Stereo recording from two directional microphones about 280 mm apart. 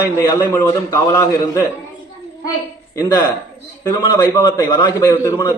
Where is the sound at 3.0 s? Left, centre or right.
Centre.